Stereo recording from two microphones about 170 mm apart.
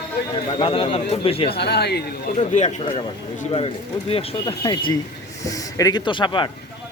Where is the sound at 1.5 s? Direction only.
75° left (ahead or behind).